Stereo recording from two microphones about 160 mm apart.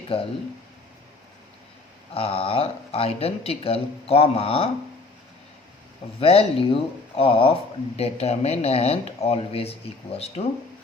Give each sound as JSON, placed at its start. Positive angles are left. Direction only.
{"t": 0.1, "sound": "speech", "side_deg": 35}
{"t": 2.1, "sound": "speech", "side_deg": 40}
{"t": 6.1, "sound": "speech", "side_deg": 35}